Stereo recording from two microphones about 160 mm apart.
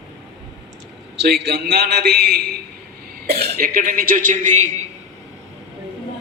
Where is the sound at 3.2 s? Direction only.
75° right (ahead or behind); by 4.7 s 55° right (ahead or behind).